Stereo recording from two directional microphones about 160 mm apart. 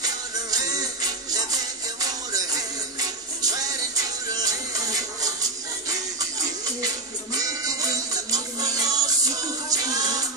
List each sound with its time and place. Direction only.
0.0 s music: 25° right (ahead or behind)
2.0 s music: 20° right (ahead or behind)